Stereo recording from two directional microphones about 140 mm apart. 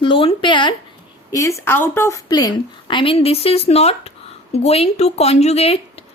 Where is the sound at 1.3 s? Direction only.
20° left (ahead or behind).